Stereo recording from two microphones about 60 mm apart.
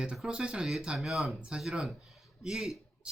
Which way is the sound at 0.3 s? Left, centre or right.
Centre.